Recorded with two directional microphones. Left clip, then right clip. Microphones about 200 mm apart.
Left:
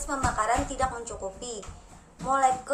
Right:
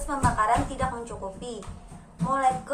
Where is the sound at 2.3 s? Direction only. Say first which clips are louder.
Left 1 dB; 20° left (ahead or behind).